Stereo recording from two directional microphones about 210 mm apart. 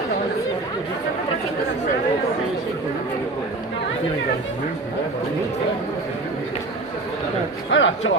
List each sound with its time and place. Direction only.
7.7 s a man's voice: 60° left (ahead or behind)